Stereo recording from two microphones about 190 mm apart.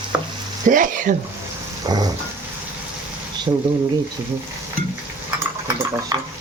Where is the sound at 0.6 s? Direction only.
45° right (ahead or behind).